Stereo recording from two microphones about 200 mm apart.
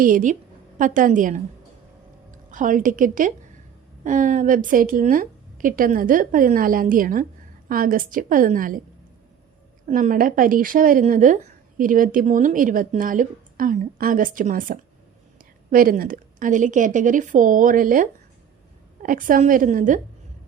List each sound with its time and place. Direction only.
0.0 s a woman's voice: 40° right (ahead or behind)
9.8 s a woman's voice: 40° right (ahead or behind)